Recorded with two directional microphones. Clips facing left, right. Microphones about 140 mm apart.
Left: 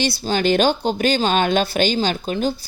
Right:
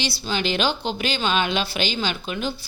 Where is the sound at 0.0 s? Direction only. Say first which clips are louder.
Left 6 dB; 45° left (ahead or behind).